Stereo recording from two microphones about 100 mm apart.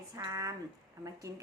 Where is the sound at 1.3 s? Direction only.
30° right (ahead or behind).